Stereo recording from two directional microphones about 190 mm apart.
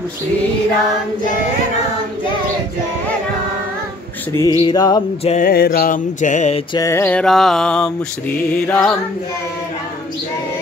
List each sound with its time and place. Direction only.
4.3 s mantra: 15° left (ahead or behind)
4.6 s music: 20° left (ahead or behind)
5.4 s mantra: 55° left (ahead or behind)
6.7 s mantra: 15° left (ahead or behind)